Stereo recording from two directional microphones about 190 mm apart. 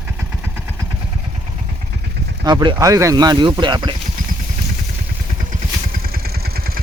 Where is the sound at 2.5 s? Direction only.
20° right (ahead or behind).